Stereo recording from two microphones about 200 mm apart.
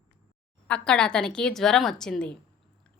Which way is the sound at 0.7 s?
5° left (ahead or behind).